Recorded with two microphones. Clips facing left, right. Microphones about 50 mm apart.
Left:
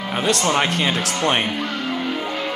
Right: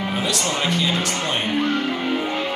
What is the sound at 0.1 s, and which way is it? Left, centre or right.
Music, left.